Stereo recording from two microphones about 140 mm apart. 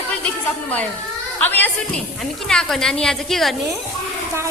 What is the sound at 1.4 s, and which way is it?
A woman's voice, 15° left (ahead or behind).